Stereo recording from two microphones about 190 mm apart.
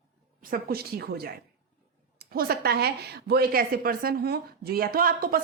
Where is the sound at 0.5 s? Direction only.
55° right (ahead or behind).